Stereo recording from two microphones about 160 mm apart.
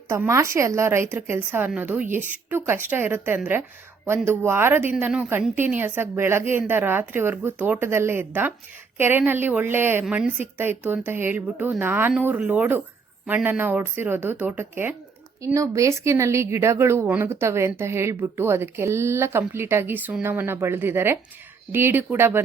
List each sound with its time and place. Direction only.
0.1 s speech: 15° right (ahead or behind)